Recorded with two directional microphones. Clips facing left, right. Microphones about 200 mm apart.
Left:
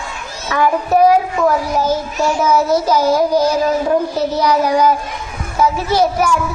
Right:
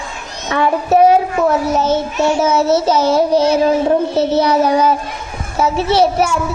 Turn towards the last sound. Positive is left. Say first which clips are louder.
# right 1 dB
turn(degrees=-25)  # may be behind; listen again after turning